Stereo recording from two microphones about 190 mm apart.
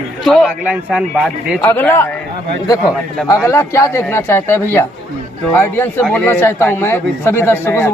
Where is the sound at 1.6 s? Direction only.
10° left (ahead or behind).